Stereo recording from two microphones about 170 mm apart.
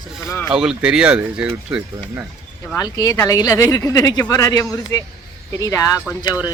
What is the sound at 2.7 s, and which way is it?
Speech, 20° left (ahead or behind).